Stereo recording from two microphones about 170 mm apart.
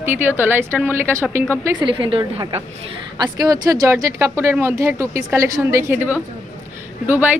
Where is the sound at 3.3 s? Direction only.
20° right (ahead or behind).